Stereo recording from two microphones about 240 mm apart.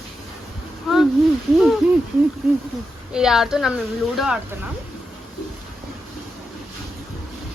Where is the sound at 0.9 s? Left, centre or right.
Centre.